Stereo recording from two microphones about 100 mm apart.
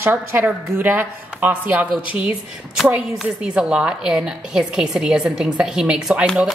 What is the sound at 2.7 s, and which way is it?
A woman's voice, 5° right (ahead or behind).